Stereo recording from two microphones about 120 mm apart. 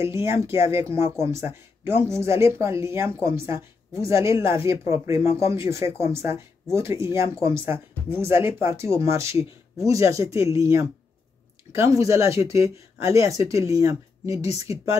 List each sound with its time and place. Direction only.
0.0 s speech: 20° right (ahead or behind)